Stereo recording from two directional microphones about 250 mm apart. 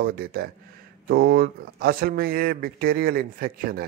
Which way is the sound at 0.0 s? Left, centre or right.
Right.